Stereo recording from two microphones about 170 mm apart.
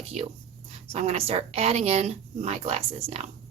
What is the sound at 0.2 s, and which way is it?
A woman's voice, 40° right (ahead or behind).